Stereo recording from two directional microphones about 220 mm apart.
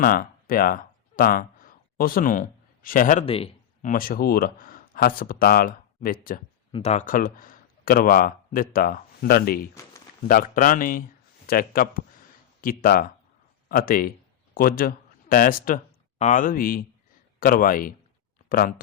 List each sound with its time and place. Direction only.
0.0 s speech: 40° left (ahead or behind)
3.2 s a sound: 25° left (ahead or behind)
3.9 s speech: 40° left (ahead or behind)
6.7 s speech: 25° left (ahead or behind); by 18.7 s 40° left (ahead or behind)